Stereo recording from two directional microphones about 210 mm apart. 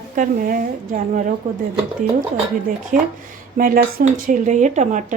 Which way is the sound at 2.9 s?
40° right (ahead or behind).